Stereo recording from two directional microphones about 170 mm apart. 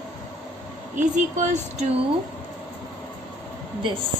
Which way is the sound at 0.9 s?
45° right (ahead or behind).